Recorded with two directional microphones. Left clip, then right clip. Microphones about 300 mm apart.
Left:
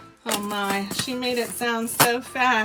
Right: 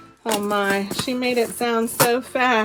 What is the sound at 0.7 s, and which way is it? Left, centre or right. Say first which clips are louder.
Speech: right 3 dB; centre.